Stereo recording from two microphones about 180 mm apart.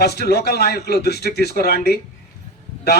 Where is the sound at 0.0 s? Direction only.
65° left (ahead or behind).